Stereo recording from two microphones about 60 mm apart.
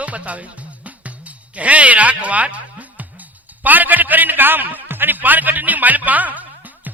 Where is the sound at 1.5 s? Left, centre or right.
Right.